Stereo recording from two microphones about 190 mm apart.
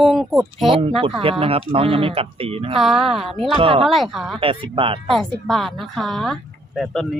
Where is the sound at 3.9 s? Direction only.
Centre (ahead or behind).